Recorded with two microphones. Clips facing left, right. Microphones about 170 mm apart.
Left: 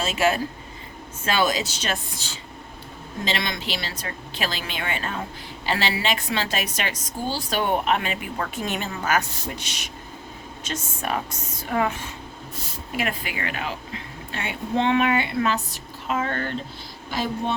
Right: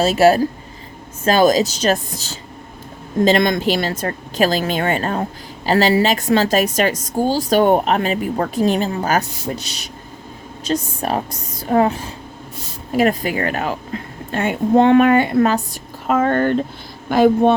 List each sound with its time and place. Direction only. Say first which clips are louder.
0.0 s a woman's voice: right 10 dB; 40° right (ahead or behind); by 17.5 s 55° right (ahead or behind)